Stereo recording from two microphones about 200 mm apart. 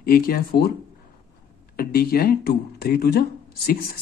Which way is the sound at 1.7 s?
50° left (ahead or behind).